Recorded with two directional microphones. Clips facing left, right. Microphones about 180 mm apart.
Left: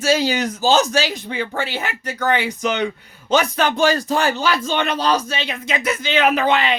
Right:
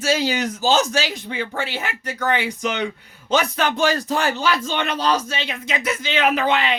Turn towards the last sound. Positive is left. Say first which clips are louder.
# left 2 dB
turn(degrees=40)  # may be behind; listen again after turning